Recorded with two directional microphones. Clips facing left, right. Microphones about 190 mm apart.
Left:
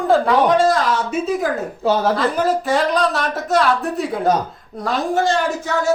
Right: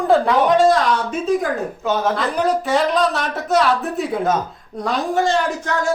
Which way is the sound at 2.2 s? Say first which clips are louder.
Left 1 dB; centre (ahead or behind).